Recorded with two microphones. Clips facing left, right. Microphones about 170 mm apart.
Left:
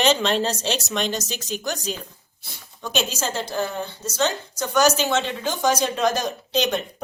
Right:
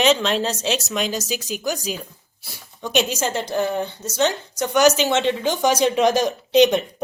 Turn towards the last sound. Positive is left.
turn(degrees=-20)  # may be behind; listen again after turning